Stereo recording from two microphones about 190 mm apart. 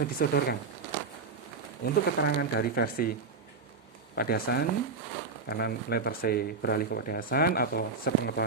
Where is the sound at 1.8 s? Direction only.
55° left (ahead or behind).